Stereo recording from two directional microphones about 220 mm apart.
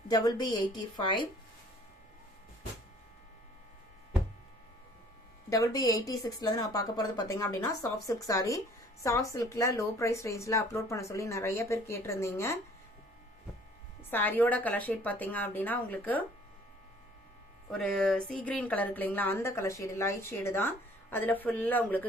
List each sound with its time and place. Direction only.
0.1 s a woman's voice: 15° left (ahead or behind)
5.5 s speech: 15° left (ahead or behind)
14.1 s speech: 10° left (ahead or behind)
17.7 s speech: centre (ahead or behind)